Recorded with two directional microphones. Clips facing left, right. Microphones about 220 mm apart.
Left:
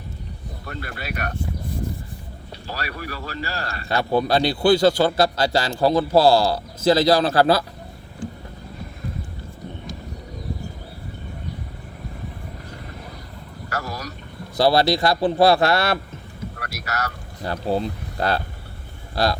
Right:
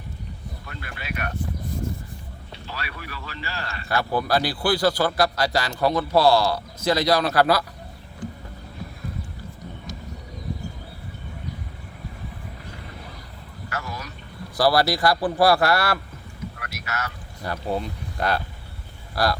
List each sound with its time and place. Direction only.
0.6 s speech: 40° left (ahead or behind)
2.6 s speech: 40° left (ahead or behind)
3.8 s a man's voice: 20° left (ahead or behind)
13.7 s vehicle: 40° left (ahead or behind)
14.5 s a man's voice: 25° left (ahead or behind)
16.6 s a man's voice: 40° left (ahead or behind)